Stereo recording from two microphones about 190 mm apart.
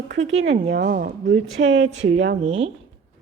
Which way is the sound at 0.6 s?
75° right (ahead or behind).